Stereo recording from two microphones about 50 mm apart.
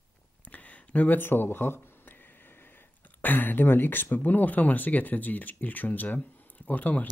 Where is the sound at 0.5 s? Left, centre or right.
Left.